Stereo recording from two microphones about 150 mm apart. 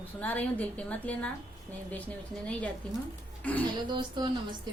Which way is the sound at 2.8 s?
5° left (ahead or behind).